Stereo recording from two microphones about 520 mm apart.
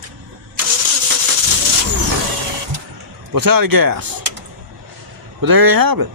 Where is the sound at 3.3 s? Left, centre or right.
Right.